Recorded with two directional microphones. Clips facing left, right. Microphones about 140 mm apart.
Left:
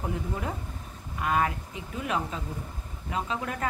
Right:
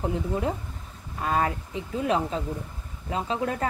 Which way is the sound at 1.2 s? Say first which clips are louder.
Right 1 dB; 30° right (ahead or behind).